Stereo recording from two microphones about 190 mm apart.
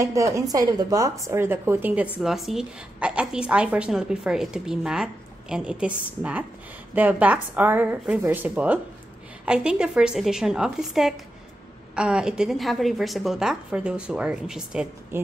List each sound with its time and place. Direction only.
0.0 s a woman's voice: 15° right (ahead or behind)